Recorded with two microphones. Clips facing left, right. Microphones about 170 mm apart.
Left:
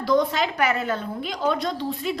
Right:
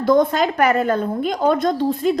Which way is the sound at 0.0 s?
50° right (ahead or behind).